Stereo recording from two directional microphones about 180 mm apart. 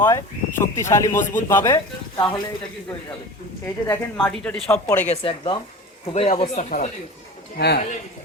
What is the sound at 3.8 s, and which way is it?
Speech, 10° left (ahead or behind).